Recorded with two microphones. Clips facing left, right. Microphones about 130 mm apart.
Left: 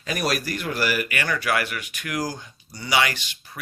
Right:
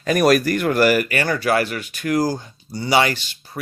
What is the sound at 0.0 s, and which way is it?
Speech, 50° right (ahead or behind).